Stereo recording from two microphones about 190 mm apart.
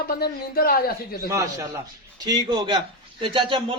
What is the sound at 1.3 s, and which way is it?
A man's voice, 15° right (ahead or behind).